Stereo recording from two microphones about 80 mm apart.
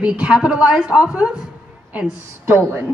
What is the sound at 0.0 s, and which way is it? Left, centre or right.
A woman's voice, centre.